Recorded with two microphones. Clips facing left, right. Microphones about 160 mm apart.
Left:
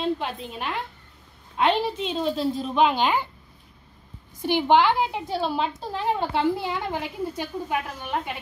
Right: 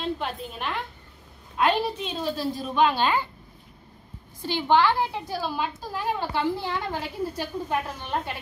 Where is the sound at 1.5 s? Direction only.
20° left (ahead or behind).